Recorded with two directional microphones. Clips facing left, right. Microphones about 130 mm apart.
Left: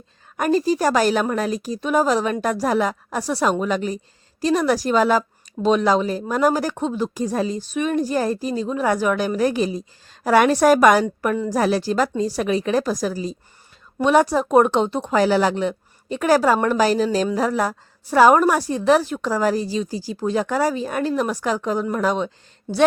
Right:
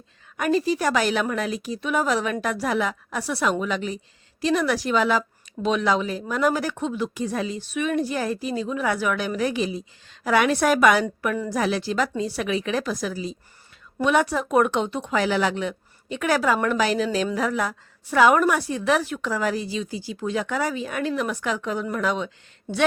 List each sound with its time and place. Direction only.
0.3 s speech: 40° left (ahead or behind)